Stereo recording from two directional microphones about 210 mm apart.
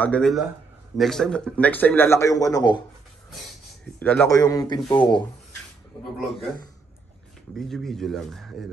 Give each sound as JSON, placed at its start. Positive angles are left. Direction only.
{"t": 0.0, "sound": "a man's voice", "side_deg": 5}
{"t": 3.8, "sound": "speech", "side_deg": 5}
{"t": 7.5, "sound": "speech", "side_deg": 0}